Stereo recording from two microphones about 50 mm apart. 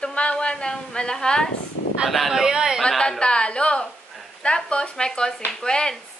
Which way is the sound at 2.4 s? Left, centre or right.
Centre.